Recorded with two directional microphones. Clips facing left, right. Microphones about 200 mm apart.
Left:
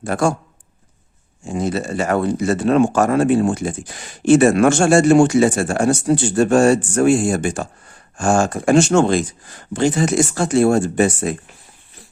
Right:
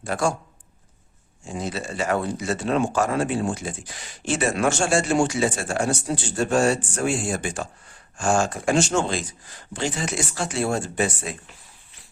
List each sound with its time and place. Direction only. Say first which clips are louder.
0.0 s speech: left 6 dB; 50° left (ahead or behind)
1.5 s speech: left 8 dB; 50° left (ahead or behind)